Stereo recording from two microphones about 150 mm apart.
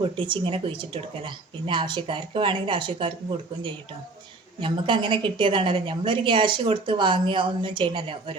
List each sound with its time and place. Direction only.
0.0 s a woman's voice: 35° right (ahead or behind)
4.6 s a woman's voice: 30° right (ahead or behind)